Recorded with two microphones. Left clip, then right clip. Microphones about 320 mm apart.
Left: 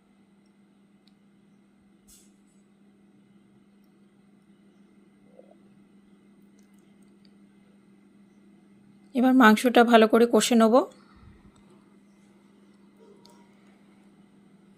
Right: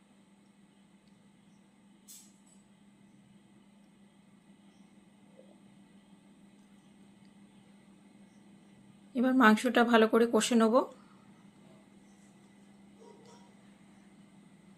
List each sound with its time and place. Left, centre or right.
9.1 s speech: left